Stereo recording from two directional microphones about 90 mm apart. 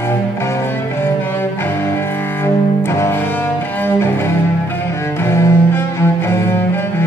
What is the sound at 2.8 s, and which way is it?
Cello, 30° left (ahead or behind).